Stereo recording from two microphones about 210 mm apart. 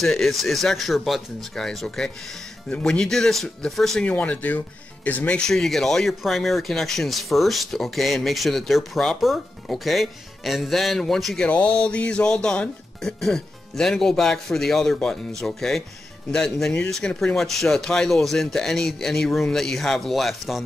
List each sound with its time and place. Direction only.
0.0 s speech: centre (ahead or behind)